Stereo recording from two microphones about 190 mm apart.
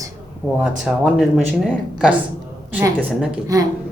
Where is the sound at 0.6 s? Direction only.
Centre (ahead or behind).